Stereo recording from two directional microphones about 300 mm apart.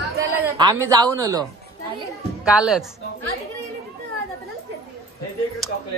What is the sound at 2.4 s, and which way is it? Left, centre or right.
Speech, centre.